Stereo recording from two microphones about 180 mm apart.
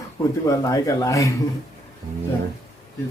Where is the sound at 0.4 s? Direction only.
20° left (ahead or behind).